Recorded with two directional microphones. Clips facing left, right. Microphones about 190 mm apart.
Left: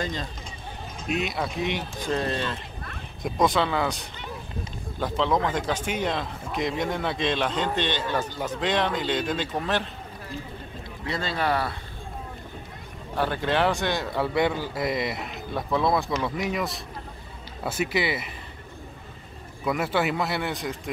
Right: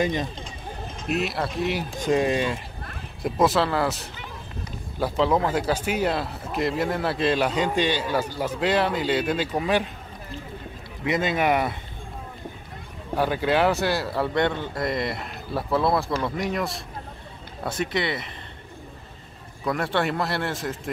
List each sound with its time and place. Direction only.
0.0 s speech: 15° right (ahead or behind)
1.0 s a man's voice: centre (ahead or behind)
11.1 s speech: 20° right (ahead or behind)
13.1 s a man's voice: 10° right (ahead or behind); by 18.3 s 5° left (ahead or behind)
19.6 s a man's voice: 5° left (ahead or behind)